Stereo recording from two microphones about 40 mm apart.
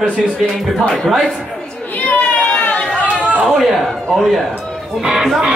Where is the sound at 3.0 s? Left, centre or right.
Right.